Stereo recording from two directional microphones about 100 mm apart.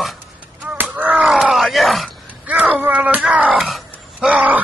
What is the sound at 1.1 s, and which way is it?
Groan, centre (ahead or behind).